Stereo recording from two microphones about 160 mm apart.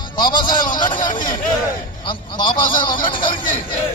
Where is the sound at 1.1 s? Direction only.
60° left (ahead or behind).